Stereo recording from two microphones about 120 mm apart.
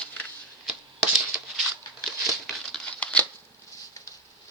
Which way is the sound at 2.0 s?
Centre (ahead or behind).